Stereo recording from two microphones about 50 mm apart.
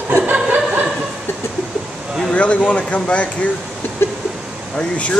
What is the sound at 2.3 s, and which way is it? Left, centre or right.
Speech, left.